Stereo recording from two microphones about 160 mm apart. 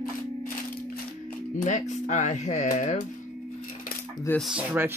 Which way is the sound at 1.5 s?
50° left (ahead or behind).